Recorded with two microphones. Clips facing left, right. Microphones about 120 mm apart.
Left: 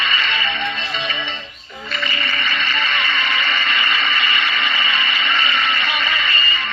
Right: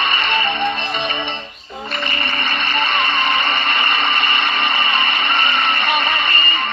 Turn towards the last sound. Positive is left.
turn(degrees=-55)  # may be behind; listen again after turning